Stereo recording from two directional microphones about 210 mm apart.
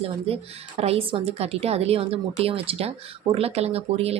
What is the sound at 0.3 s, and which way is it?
Speech, 30° right (ahead or behind).